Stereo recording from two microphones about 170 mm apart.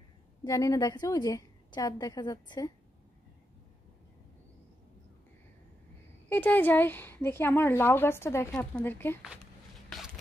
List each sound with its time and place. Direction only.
0.4 s a woman's voice: 20° left (ahead or behind)
6.2 s a woman's voice: 10° left (ahead or behind)
9.9 s a sound: centre (ahead or behind)